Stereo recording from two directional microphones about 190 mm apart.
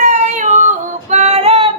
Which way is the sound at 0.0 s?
40° right (ahead or behind).